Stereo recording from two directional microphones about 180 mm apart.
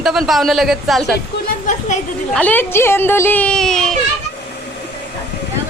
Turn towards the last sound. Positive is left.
turn(degrees=5)  # may be behind; listen again after turning